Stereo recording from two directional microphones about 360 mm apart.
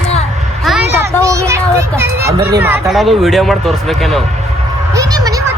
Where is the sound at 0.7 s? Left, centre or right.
Centre.